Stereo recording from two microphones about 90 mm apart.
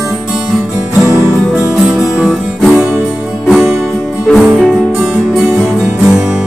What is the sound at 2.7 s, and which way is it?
Music, 30° right (ahead or behind).